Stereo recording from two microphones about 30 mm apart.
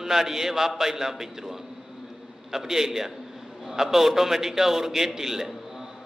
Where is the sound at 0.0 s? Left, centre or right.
Centre.